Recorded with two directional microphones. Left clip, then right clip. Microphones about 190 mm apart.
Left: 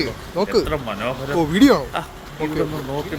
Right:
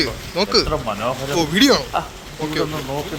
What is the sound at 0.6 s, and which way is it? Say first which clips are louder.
Speech: right 2 dB; 10° right (ahead or behind).